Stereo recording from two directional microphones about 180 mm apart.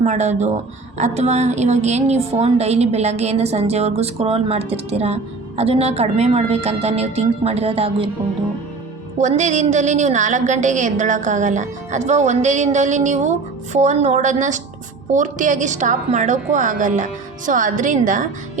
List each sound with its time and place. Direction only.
0.0 s a woman's voice: 40° right (ahead or behind)
9.1 s a woman's voice: 40° right (ahead or behind)